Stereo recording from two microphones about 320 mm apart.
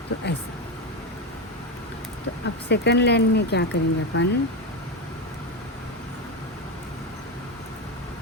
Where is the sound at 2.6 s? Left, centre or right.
Left.